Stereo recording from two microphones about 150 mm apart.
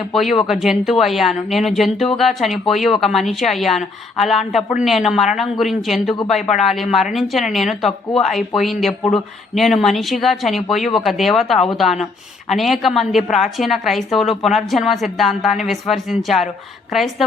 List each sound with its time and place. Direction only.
0.1 s speech: centre (ahead or behind)
6.5 s speech: 45° left (ahead or behind)
6.7 s speech: centre (ahead or behind)